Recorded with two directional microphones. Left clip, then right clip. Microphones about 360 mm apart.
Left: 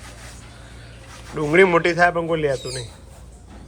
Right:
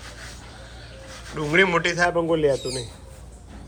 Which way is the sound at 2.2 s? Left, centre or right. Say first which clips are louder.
Even; right.